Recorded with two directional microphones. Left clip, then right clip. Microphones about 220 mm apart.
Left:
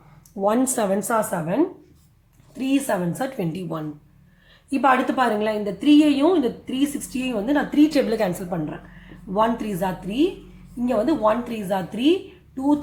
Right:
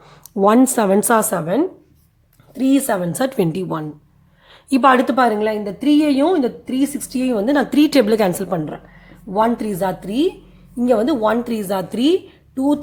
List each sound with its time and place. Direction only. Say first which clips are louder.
0.3 s a woman's voice: right 7 dB; 35° right (ahead or behind)